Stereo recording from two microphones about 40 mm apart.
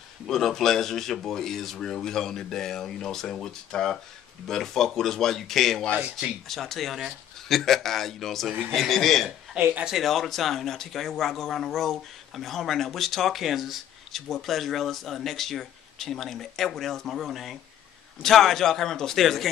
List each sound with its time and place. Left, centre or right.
0.3 s speech: centre
9.6 s speech: right
10.0 s speech: centre